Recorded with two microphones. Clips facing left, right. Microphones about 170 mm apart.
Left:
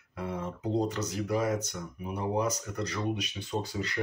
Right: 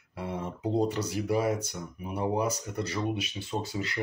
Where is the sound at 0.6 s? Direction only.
10° right (ahead or behind).